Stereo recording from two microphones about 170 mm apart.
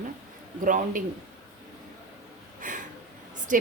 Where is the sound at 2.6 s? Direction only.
50° right (ahead or behind).